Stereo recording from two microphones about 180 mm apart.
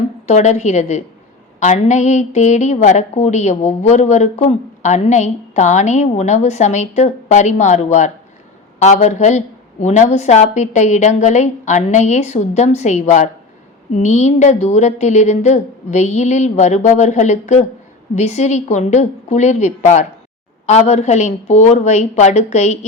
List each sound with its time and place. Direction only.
0.3 s a woman's voice: 40° left (ahead or behind)